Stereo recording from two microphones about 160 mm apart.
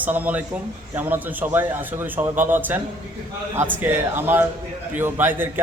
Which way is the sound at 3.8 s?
10° right (ahead or behind).